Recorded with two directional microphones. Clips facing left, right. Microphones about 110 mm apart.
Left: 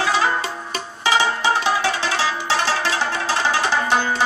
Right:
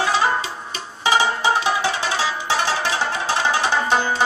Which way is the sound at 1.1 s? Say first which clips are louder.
Even; 15° right (ahead or behind).